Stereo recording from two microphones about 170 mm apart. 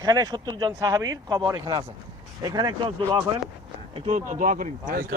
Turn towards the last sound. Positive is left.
turn(degrees=-55)  # may be behind; listen again after turning